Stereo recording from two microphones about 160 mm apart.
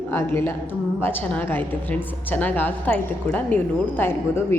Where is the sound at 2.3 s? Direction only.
10° left (ahead or behind).